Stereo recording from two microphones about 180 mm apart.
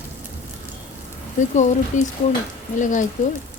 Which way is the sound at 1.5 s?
40° left (ahead or behind).